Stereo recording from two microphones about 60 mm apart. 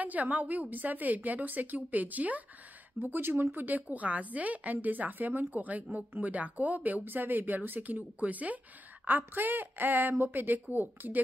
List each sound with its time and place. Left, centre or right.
0.0 s a woman's voice: right
3.0 s a woman's voice: right